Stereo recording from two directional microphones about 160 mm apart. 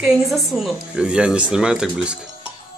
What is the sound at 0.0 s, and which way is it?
Speech, 5° right (ahead or behind).